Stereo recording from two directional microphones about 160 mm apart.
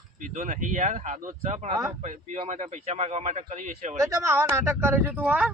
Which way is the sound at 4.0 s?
20° right (ahead or behind).